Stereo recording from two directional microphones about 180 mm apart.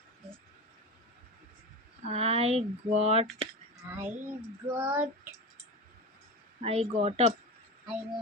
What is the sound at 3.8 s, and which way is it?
Child singing, 10° right (ahead or behind).